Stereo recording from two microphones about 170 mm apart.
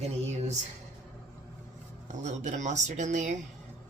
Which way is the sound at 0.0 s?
40° right (ahead or behind).